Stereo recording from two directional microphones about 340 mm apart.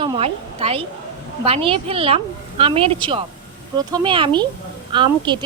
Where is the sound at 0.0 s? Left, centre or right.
Centre.